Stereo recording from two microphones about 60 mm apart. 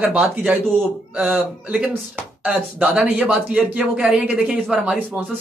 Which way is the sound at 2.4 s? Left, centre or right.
Centre.